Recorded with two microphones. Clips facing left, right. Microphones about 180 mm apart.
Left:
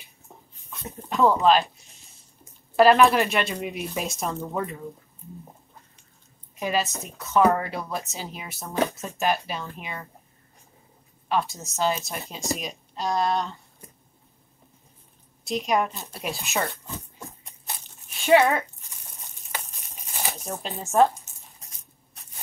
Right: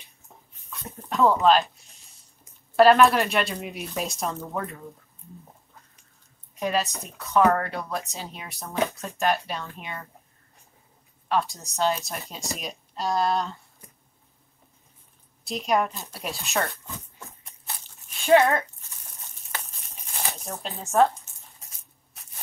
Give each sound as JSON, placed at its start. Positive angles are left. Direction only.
{"t": 0.8, "sound": "a sound", "side_deg": 0}
{"t": 2.7, "sound": "a woman's voice", "side_deg": 0}
{"t": 6.5, "sound": "a woman's voice", "side_deg": 0}
{"t": 11.2, "sound": "a woman's voice", "side_deg": 0}
{"t": 15.4, "sound": "a woman's voice", "side_deg": 0}
{"t": 17.4, "sound": "a sound", "side_deg": 20}
{"t": 18.2, "sound": "speech", "side_deg": 0}
{"t": 20.2, "sound": "speech", "side_deg": 0}